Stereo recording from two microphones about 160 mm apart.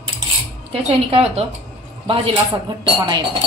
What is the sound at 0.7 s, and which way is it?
A woman's voice, 35° right (ahead or behind).